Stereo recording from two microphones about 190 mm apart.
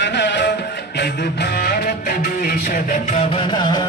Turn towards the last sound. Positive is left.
turn(degrees=25)  # may be behind; listen again after turning